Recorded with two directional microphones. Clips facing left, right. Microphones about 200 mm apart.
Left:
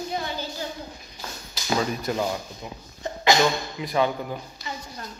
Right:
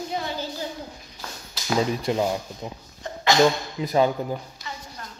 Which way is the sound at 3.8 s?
35° right (ahead or behind).